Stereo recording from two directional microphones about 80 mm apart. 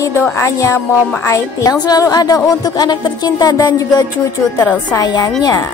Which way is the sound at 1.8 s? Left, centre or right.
Left.